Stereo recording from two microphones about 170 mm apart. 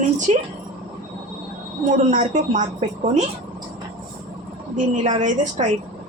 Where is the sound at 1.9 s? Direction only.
50° right (ahead or behind).